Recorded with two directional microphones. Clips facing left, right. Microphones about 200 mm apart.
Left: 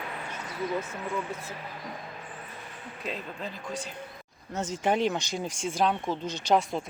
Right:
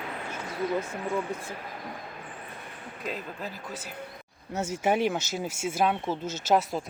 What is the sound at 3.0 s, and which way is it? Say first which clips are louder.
Speech: right 1 dB; 5° right (ahead or behind).